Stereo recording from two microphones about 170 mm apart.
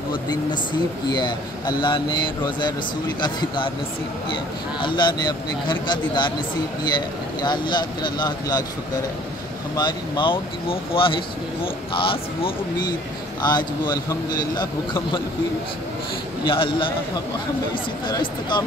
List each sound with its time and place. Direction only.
0.1 s speech: 25° left (ahead or behind)
4.7 s speech: 30° left (ahead or behind)
7.4 s speech: 25° left (ahead or behind)
9.8 s speech: 25° left (ahead or behind)
16.4 s speech: 30° left (ahead or behind)
18.0 s speech: 25° left (ahead or behind)